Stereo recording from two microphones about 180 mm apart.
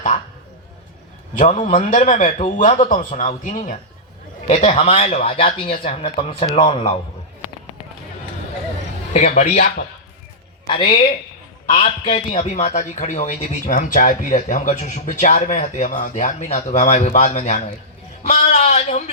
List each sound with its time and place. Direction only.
1.4 s speech: 45° left (ahead or behind)
9.1 s speech: 40° left (ahead or behind)
10.7 s speech: 30° left (ahead or behind)
12.0 s speech: 35° left (ahead or behind)